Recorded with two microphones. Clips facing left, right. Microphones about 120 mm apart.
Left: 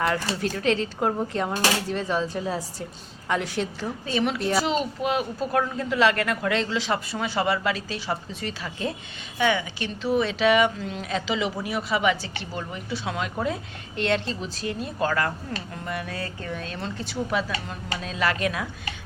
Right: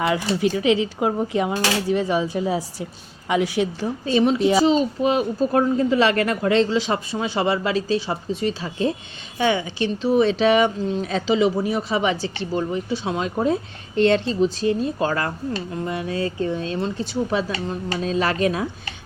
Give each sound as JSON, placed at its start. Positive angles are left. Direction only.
{"t": 0.0, "sound": "speech", "side_deg": -5}
{"t": 4.0, "sound": "a woman's voice", "side_deg": -30}
{"t": 4.4, "sound": "speech", "side_deg": -10}
{"t": 4.6, "sound": "a woman's voice", "side_deg": -30}